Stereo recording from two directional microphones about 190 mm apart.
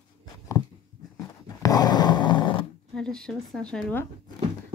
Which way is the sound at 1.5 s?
20° left (ahead or behind).